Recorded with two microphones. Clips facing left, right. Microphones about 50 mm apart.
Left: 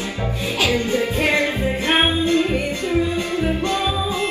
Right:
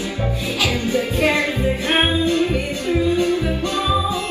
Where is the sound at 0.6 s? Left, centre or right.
Left.